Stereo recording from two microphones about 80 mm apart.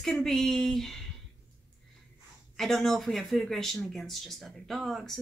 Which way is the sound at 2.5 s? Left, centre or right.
Centre.